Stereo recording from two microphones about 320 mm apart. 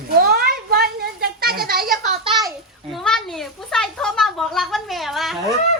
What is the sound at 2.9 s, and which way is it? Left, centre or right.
Speech, centre.